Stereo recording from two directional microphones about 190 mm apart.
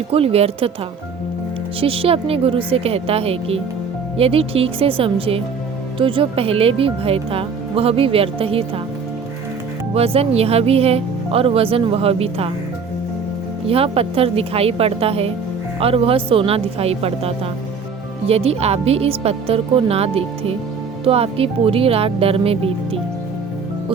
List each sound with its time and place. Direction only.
0.1 s speech: 30° right (ahead or behind)
1.8 s speech: 30° right (ahead or behind)
9.9 s speech: 30° right (ahead or behind)
13.7 s speech: 30° right (ahead or behind)